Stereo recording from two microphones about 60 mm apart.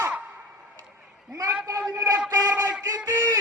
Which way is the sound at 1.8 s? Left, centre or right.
Right.